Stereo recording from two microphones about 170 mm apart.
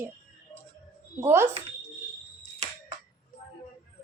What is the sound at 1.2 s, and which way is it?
Speech, 15° right (ahead or behind).